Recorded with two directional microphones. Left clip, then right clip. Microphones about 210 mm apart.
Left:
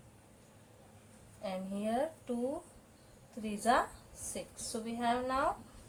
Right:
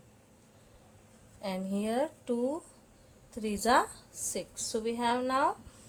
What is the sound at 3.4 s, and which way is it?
A woman's voice, 50° right (ahead or behind).